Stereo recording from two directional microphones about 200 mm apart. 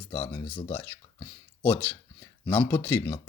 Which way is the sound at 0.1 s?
20° left (ahead or behind).